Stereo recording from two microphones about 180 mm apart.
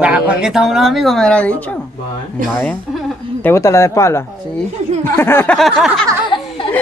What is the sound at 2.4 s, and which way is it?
Speech, 50° right (ahead or behind).